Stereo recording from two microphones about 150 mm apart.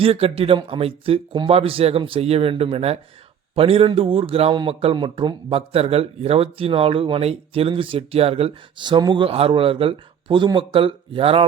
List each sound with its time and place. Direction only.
0.0 s a man's voice: 40° right (ahead or behind)